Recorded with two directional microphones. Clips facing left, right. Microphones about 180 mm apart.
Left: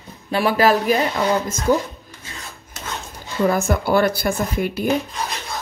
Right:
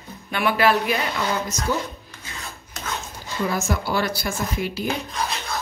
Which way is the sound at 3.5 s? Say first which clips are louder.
Left 6 dB; 55° left (ahead or behind).